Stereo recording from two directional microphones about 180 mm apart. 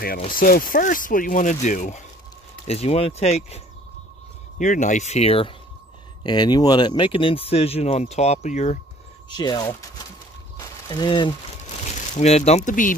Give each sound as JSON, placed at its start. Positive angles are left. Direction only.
{"t": 0.3, "sound": "speech", "side_deg": 50}
{"t": 9.3, "sound": "speech", "side_deg": 25}
{"t": 10.6, "sound": "a sound", "side_deg": 20}
{"t": 11.8, "sound": "speech", "side_deg": 40}